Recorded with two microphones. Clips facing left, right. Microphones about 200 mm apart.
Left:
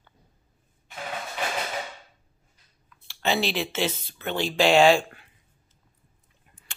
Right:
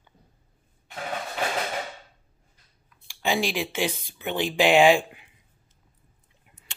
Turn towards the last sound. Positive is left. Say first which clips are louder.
# even
turn(degrees=-15)  # may be behind; listen again after turning